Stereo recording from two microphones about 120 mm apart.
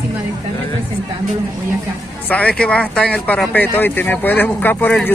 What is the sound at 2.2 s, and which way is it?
Speech, 10° left (ahead or behind).